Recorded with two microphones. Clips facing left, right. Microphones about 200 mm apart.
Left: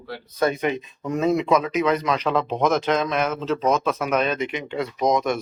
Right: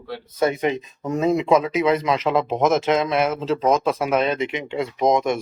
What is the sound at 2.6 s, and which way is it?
Speech, 25° right (ahead or behind).